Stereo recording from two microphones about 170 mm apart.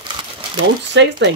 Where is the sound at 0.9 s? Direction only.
90° right.